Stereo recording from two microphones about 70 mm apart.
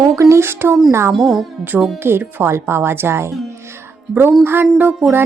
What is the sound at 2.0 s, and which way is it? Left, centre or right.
A woman's voice, right.